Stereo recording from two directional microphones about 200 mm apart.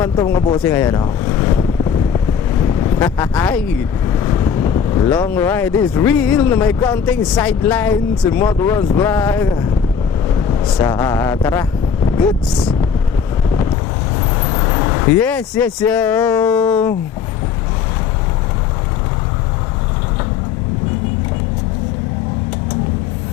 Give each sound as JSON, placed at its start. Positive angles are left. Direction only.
{"t": 0.0, "sound": "speech", "side_deg": 10}
{"t": 3.0, "sound": "speech", "side_deg": 10}
{"t": 4.3, "sound": "vehicle", "side_deg": 20}
{"t": 5.0, "sound": "speech", "side_deg": 10}
{"t": 7.3, "sound": "speech", "side_deg": 15}
{"t": 10.8, "sound": "speech", "side_deg": 15}
{"t": 14.4, "sound": "vehicle", "side_deg": 20}
{"t": 15.2, "sound": "speech", "side_deg": 5}